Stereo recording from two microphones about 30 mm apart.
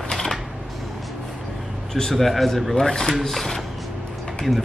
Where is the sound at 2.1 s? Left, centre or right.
Centre.